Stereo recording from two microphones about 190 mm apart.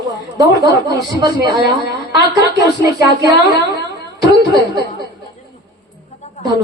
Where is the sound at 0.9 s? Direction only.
20° right (ahead or behind).